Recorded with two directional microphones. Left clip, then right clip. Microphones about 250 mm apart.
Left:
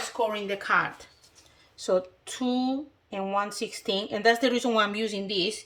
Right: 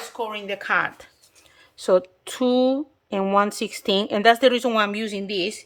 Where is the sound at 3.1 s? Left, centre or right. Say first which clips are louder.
Right 8 dB; centre.